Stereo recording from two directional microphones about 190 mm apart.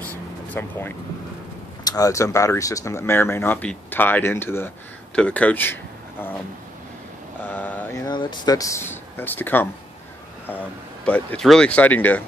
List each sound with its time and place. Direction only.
0.5 s speech: 10° left (ahead or behind)
7.4 s speech: 10° left (ahead or behind)
11.1 s speech: 5° left (ahead or behind)